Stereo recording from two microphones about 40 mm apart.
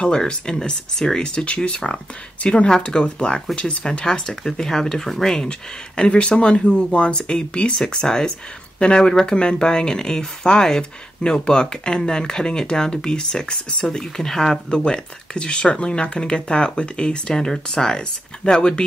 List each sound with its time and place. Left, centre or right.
0.0 s speech: left
4.3 s speech: centre
14.9 s speech: left